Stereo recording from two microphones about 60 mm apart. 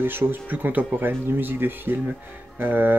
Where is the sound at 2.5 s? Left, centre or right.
Right.